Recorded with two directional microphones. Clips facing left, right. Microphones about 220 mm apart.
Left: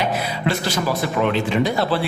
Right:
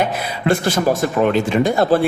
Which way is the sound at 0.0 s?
50° right (ahead or behind).